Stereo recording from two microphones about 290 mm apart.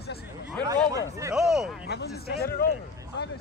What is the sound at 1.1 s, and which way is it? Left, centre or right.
Speech, centre.